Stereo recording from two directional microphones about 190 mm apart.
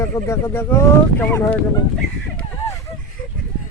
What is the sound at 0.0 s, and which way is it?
Speech, 15° left (ahead or behind).